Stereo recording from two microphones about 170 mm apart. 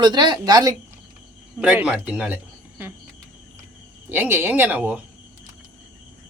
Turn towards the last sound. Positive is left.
turn(degrees=-10)  # may be behind; listen again after turning